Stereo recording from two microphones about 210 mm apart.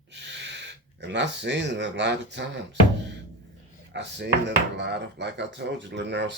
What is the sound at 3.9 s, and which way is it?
Speech, 55° right (ahead or behind).